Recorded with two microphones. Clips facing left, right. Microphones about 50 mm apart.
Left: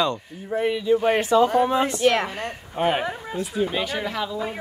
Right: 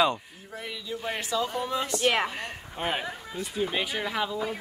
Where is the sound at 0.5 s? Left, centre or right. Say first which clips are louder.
Left 15 dB; left.